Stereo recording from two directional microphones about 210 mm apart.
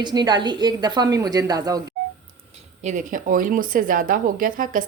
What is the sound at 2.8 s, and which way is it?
Speech, 35° right (ahead or behind).